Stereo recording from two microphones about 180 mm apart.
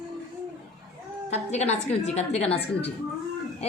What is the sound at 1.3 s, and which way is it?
A woman's voice, 40° left (ahead or behind).